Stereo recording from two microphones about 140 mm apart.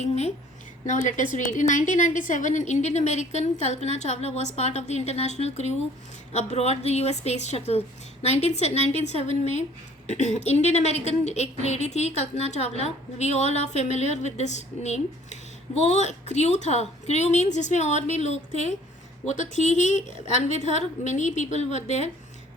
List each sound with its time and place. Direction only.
0.0 s a woman's voice: 50° left (ahead or behind)
0.9 s a woman's voice: 60° left (ahead or behind)